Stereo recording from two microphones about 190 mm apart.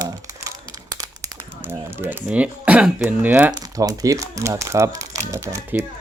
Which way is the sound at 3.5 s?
20° right (ahead or behind).